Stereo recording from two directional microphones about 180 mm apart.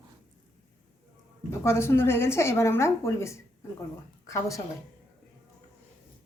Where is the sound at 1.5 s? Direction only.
15° left (ahead or behind).